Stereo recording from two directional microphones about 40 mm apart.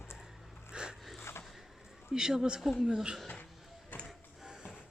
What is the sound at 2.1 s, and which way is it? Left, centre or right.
Speech, centre.